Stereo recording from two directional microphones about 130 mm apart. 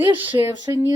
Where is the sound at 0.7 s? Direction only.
25° right (ahead or behind).